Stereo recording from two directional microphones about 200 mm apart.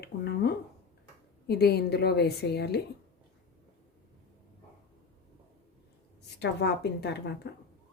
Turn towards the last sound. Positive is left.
turn(degrees=55)  # may be behind; listen again after turning